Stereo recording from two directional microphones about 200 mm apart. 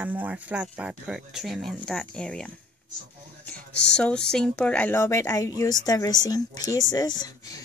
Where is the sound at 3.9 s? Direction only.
5° left (ahead or behind).